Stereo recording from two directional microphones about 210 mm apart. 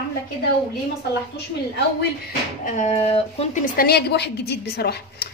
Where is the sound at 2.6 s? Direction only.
35° left (ahead or behind).